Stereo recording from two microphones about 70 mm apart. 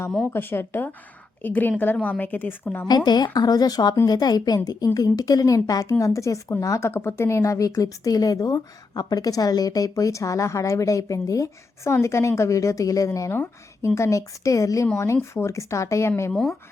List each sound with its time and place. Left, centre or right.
0.3 s a woman's voice: left
2.8 s a woman's voice: left
4.9 s a woman's voice: left
13.8 s a woman's voice: left
16.3 s speech: centre